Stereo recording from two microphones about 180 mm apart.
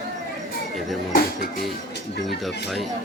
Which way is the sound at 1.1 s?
50° left (ahead or behind).